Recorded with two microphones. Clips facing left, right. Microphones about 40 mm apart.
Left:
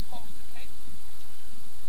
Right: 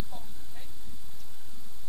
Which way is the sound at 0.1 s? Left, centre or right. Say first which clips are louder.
Left 2 dB; left.